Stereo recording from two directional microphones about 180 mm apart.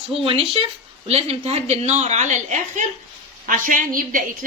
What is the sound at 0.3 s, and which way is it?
A woman's voice, 30° right (ahead or behind).